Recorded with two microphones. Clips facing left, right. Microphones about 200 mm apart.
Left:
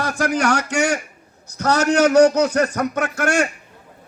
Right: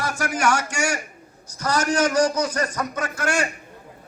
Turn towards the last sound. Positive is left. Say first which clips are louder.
# left 5 dB
turn(degrees=65)  # may be behind; listen again after turning